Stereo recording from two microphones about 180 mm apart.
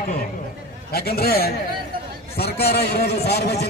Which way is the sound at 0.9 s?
60° left (ahead or behind).